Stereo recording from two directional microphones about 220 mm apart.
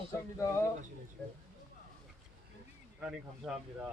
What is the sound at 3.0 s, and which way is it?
Speech, centre (ahead or behind).